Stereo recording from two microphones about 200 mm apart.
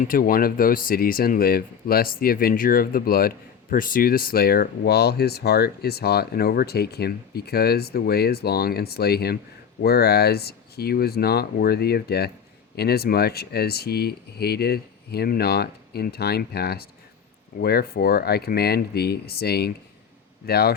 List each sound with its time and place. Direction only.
0.0 s speech: 45° left (ahead or behind)